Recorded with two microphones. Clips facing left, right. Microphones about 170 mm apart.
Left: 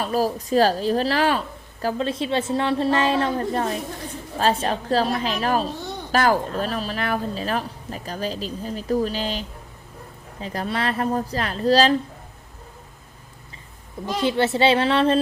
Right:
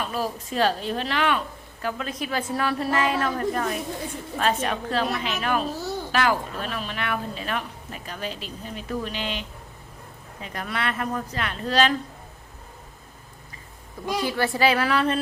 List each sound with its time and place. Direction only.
0.0 s a woman's voice: 40° left (ahead or behind)
14.2 s a woman's voice: 25° left (ahead or behind)